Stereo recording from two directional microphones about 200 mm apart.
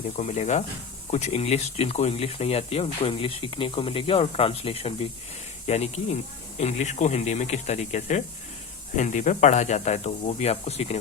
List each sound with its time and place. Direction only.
0.2 s speech: 35° left (ahead or behind)